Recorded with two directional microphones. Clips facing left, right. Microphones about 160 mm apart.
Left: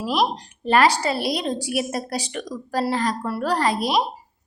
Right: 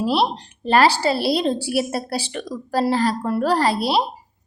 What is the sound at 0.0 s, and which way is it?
A woman's voice, 30° right (ahead or behind).